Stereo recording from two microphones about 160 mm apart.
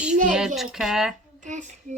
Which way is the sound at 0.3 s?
5° right (ahead or behind).